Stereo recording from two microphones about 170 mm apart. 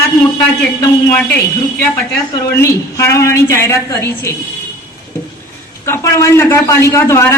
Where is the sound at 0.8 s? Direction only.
15° left (ahead or behind).